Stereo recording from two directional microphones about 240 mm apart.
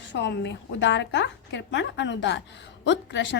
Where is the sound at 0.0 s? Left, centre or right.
Left.